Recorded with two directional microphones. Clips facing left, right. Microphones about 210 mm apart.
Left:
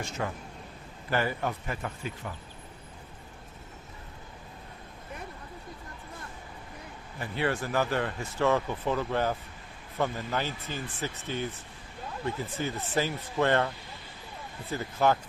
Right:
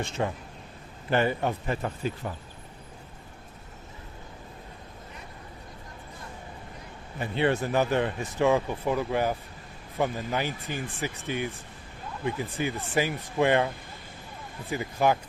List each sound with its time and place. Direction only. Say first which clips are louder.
0.0 s speech: right 4 dB; 25° right (ahead or behind)
7.2 s speech: right 4 dB; 20° right (ahead or behind)
14.7 s speech: right 1 dB; 15° right (ahead or behind)